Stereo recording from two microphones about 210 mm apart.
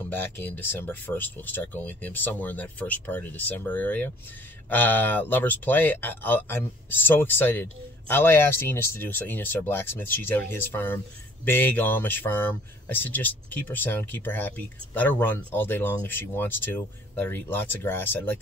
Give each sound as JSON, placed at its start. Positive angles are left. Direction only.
{"t": 0.1, "sound": "speech", "side_deg": 10}